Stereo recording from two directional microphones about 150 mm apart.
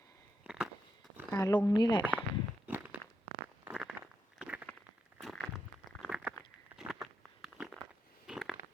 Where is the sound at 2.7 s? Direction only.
15° right (ahead or behind).